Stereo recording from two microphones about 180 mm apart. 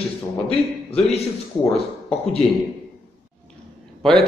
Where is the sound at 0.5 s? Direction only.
35° left (ahead or behind).